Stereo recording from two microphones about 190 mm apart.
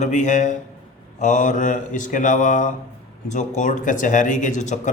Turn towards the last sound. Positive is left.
turn(degrees=40)  # may be behind; listen again after turning